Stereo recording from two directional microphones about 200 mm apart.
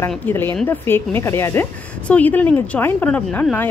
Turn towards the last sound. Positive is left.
turn(degrees=10)  # may be behind; listen again after turning